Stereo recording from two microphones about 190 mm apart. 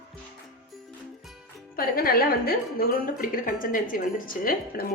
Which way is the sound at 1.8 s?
50° left (ahead or behind).